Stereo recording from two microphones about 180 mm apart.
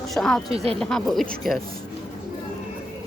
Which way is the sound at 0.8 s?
Centre (ahead or behind).